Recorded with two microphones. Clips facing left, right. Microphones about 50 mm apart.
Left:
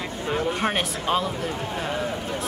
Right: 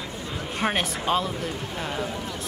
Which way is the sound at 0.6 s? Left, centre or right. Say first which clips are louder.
Left 1 dB; centre.